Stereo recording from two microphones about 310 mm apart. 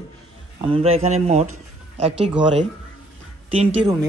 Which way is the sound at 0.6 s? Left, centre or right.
Centre.